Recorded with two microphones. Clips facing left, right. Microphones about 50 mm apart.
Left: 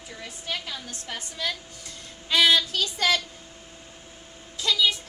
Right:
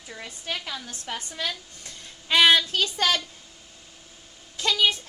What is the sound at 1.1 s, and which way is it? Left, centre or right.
Speech, right.